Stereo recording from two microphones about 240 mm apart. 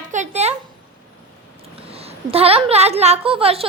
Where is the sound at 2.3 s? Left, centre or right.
Right.